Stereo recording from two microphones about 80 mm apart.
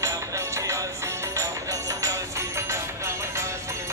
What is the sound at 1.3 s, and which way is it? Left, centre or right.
Music, right.